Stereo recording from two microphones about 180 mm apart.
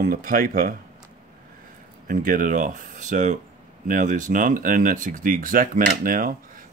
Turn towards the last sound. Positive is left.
turn(degrees=-50)  # may be behind; listen again after turning